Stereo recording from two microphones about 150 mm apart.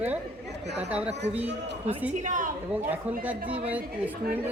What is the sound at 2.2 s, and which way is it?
Speech, 55° right (ahead or behind).